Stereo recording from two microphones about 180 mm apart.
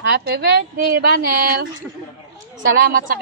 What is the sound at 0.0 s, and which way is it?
A woman's voice, 60° right (ahead or behind).